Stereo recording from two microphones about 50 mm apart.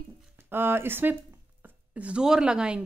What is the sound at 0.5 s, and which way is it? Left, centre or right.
Speech, right.